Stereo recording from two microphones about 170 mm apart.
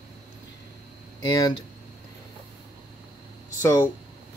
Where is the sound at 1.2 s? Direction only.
25° left (ahead or behind).